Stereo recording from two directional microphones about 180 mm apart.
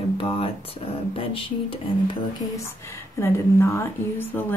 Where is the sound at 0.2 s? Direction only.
30° left (ahead or behind).